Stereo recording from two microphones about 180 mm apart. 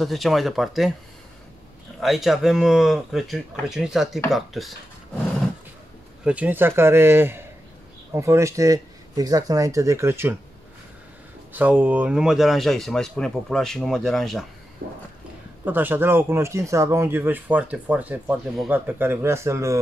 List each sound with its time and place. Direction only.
0.0 s speech: centre (ahead or behind)
2.0 s speech: centre (ahead or behind)
6.2 s speech: 10° right (ahead or behind)
11.5 s speech: 10° right (ahead or behind)
14.8 s a sound: 55° right (ahead or behind)
15.6 s speech: 10° right (ahead or behind)